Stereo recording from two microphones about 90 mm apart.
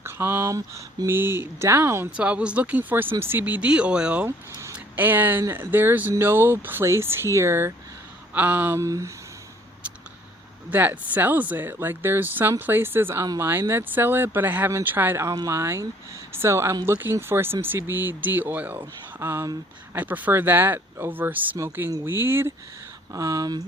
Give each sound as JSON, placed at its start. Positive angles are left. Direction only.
{"t": 0.0, "sound": "speech", "side_deg": -25}
{"t": 2.1, "sound": "speech", "side_deg": -15}
{"t": 4.3, "sound": "speech", "side_deg": -25}
{"t": 8.8, "sound": "speech", "side_deg": -35}
{"t": 10.7, "sound": "speech", "side_deg": -20}
{"t": 19.9, "sound": "speech", "side_deg": -20}
{"t": 23.1, "sound": "speech", "side_deg": -40}